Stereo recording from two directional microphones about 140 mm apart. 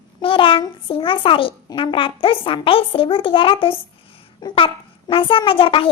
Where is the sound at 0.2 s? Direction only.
40° left (ahead or behind).